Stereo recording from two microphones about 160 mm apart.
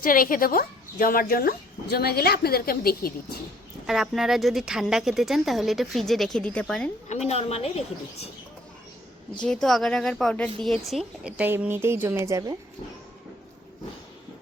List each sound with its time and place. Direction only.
0.0 s speech: 60° left (ahead or behind)
3.8 s a woman's voice: 5° right (ahead or behind)
7.1 s a woman's voice: 40° left (ahead or behind)
9.4 s a woman's voice: 5° left (ahead or behind); by 12.5 s 20° right (ahead or behind)